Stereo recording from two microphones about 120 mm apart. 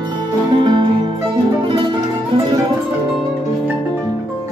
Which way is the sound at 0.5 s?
40° right (ahead or behind).